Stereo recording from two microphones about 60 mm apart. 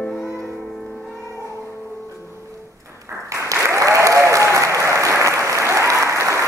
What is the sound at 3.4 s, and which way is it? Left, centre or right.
Applause, right.